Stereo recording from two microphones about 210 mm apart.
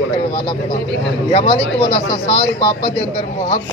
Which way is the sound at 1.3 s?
20° left (ahead or behind).